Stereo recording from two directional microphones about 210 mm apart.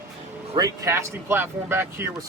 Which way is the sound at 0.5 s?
20° right (ahead or behind).